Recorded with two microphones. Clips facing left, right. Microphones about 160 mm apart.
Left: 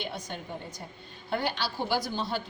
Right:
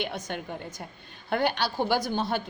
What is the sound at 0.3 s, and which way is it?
A woman's voice, 65° right (ahead or behind).